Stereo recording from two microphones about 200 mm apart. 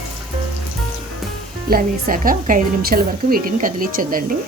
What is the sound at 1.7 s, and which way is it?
A woman's voice, 45° right (ahead or behind).